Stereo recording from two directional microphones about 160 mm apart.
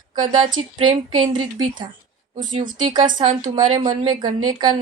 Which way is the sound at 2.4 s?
55° right (ahead or behind).